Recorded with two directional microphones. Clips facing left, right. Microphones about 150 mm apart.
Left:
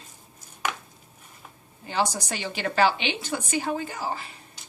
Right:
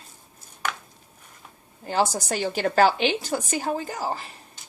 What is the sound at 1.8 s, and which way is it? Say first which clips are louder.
A woman's voice: right 3 dB; 45° right (ahead or behind).